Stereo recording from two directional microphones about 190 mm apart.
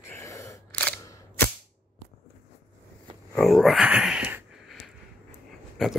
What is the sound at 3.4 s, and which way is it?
Speech, centre (ahead or behind).